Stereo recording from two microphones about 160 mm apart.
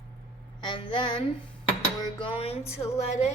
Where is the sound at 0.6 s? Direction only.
30° left (ahead or behind).